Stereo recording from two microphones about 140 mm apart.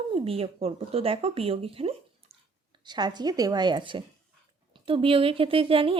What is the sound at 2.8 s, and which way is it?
Speech, 30° right (ahead or behind).